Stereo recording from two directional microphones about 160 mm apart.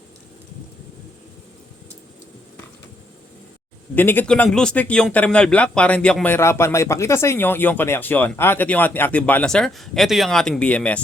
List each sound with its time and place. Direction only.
3.9 s speech: 10° left (ahead or behind)